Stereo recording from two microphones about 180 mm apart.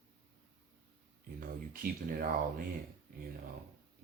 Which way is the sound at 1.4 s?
55° right (ahead or behind).